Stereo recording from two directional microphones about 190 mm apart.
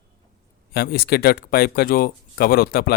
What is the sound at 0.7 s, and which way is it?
Speech, 55° left (ahead or behind).